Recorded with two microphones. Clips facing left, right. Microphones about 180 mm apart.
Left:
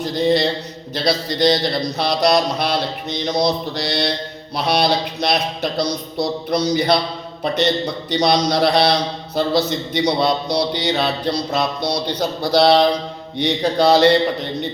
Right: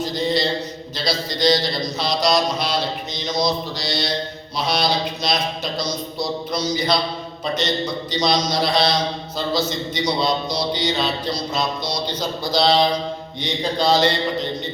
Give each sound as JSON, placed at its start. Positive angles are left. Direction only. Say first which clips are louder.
{"t": 0.0, "sound": "a man's voice", "louder": "left 4 dB", "side_deg": 60}
{"t": 8.1, "sound": "a man's voice", "louder": "left 4 dB", "side_deg": 60}